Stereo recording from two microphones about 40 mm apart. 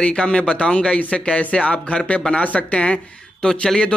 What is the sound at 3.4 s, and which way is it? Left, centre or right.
Speech, centre.